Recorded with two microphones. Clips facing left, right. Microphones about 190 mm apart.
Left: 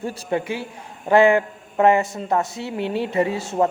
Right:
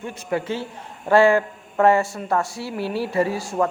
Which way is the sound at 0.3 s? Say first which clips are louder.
Right 1 dB; 15° left (ahead or behind).